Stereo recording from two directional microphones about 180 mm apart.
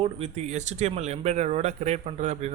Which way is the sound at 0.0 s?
40° right (ahead or behind).